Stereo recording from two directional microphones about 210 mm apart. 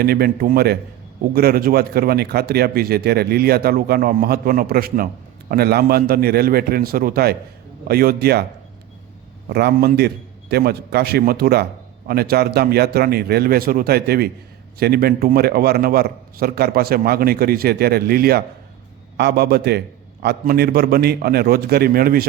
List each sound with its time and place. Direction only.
0.0 s speech: 45° right (ahead or behind)
9.5 s speech: 50° right (ahead or behind)